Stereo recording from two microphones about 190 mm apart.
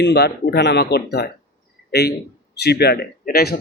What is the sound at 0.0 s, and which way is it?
Speech, 60° left (ahead or behind).